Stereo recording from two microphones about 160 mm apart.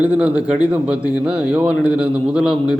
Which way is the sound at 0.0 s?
10° right (ahead or behind).